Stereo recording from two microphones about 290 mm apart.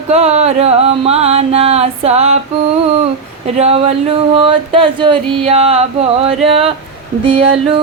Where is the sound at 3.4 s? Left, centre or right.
Right.